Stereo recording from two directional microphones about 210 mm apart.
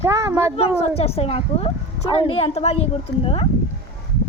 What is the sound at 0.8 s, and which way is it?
A woman's voice, 30° left (ahead or behind).